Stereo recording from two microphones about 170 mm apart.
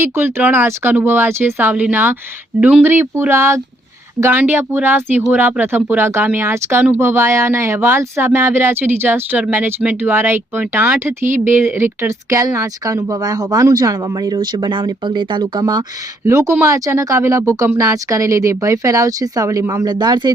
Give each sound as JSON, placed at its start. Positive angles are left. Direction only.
{"t": 0.0, "sound": "speech", "side_deg": -15}